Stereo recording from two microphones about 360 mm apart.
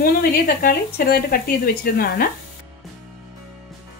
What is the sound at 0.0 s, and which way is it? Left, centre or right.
Speech, left.